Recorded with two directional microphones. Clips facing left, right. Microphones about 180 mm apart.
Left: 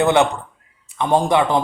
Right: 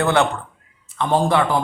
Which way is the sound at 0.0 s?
20° left (ahead or behind).